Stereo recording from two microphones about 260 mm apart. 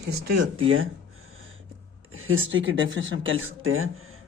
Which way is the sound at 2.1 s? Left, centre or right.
Right.